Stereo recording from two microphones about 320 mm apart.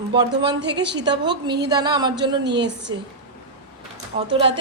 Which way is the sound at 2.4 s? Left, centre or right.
Right.